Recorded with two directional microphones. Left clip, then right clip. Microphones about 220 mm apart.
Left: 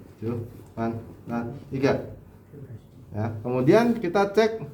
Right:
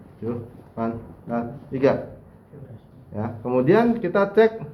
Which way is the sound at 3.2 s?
45° left (ahead or behind).